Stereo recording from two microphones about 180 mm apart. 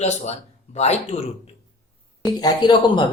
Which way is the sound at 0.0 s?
40° left (ahead or behind).